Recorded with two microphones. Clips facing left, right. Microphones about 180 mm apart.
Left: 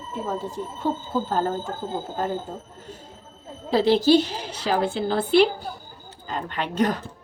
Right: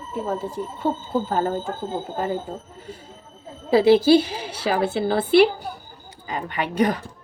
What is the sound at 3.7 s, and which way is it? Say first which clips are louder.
Speech: right 3 dB; 10° right (ahead or behind).